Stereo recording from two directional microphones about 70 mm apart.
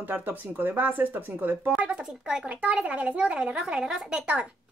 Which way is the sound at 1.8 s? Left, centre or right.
Centre.